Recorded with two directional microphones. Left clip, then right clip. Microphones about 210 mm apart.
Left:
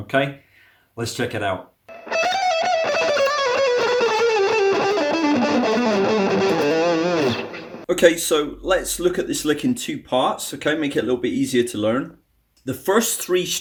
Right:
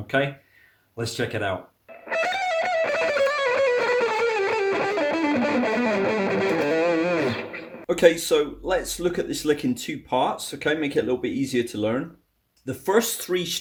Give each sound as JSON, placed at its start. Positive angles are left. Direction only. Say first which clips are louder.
{"t": 0.1, "sound": "speech", "louder": "left 3 dB", "side_deg": 0}
{"t": 2.0, "sound": "music", "louder": "left 4 dB", "side_deg": 30}
{"t": 7.9, "sound": "speech", "louder": "left 2 dB", "side_deg": 5}